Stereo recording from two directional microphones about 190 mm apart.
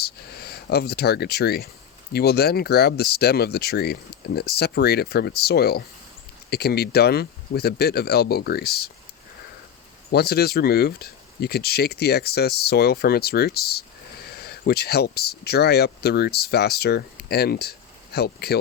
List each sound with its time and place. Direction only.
0.0 s speech: 55° left (ahead or behind)
10.1 s speech: 55° left (ahead or behind)